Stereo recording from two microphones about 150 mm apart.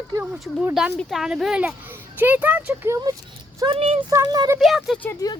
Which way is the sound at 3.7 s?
40° right (ahead or behind).